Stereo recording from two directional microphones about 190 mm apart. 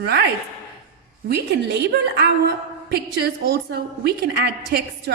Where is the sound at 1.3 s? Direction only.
60° right (ahead or behind).